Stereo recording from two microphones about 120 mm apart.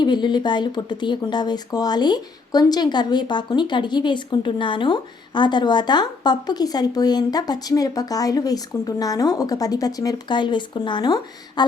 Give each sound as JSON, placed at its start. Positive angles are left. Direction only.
{"t": 0.0, "sound": "speech", "side_deg": 40}